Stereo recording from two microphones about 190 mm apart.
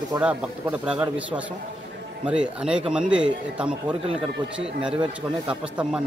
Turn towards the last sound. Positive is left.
turn(degrees=-5)  # may be behind; listen again after turning